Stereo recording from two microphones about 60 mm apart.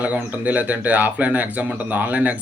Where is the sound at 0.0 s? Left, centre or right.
Right.